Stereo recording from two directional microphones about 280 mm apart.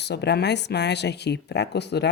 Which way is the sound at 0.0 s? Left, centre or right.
Left.